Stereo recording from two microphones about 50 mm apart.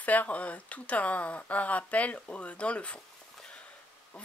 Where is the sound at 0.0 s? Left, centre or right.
Left.